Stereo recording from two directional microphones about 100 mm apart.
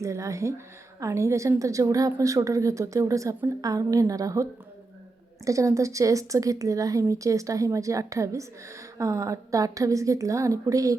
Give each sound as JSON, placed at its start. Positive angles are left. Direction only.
{"t": 0.0, "sound": "speech", "side_deg": -30}
{"t": 5.5, "sound": "speech", "side_deg": -30}